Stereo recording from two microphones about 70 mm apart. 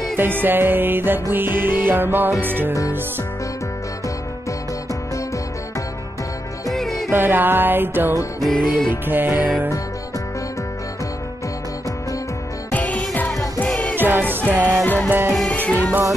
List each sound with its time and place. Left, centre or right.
0.2 s music: right
6.7 s music: centre
7.1 s music: right
8.5 s music: centre
9.0 s music: right
12.7 s music: centre
13.9 s music: right
15.5 s music: left